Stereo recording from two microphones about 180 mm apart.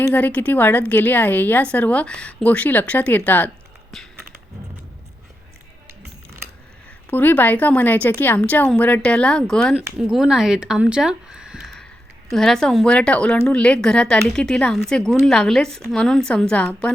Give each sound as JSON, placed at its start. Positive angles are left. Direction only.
{"t": 0.1, "sound": "a woman's voice", "side_deg": 10}
{"t": 3.9, "sound": "a sound", "side_deg": 0}
{"t": 6.0, "sound": "music", "side_deg": -60}
{"t": 7.1, "sound": "a woman's voice", "side_deg": 10}